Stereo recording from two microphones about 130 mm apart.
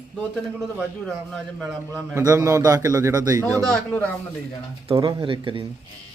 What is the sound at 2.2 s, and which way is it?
Speech, 20° right (ahead or behind).